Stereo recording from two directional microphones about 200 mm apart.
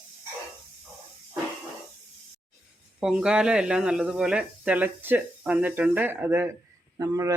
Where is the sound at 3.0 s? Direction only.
5° right (ahead or behind).